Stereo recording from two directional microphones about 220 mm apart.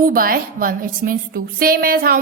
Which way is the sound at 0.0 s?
40° right (ahead or behind).